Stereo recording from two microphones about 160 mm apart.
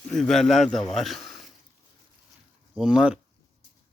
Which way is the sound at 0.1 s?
5° left (ahead or behind).